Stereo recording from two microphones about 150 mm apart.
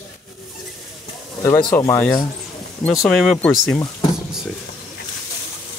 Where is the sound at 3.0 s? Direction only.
Centre (ahead or behind).